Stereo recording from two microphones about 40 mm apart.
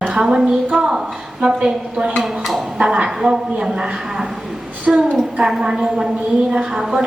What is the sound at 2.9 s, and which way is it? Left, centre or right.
A woman's voice, centre.